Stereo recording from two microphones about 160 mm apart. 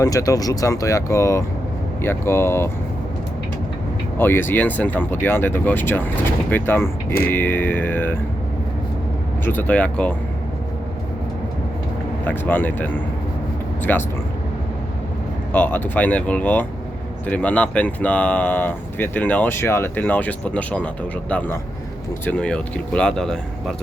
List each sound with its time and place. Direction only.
0.0 s speech: 20° left (ahead or behind)
4.2 s speech: 15° left (ahead or behind)
9.4 s speech: 15° left (ahead or behind)
12.2 s speech: 10° left (ahead or behind)
15.5 s speech: 10° left (ahead or behind)